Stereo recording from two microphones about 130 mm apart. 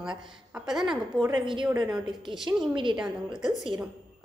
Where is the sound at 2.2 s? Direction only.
40° right (ahead or behind).